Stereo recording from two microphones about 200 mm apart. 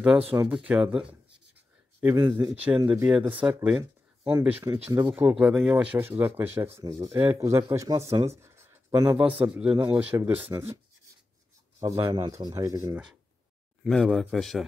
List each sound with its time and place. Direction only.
0.3 s speech: 5° right (ahead or behind)
11.8 s speech: 15° right (ahead or behind)
13.8 s speech: centre (ahead or behind)